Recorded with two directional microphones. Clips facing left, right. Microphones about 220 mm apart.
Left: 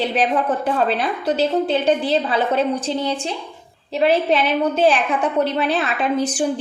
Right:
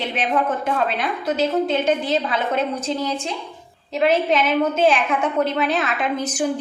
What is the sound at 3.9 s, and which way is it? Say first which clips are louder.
A woman's voice: left 1 dB; 35° left (ahead or behind).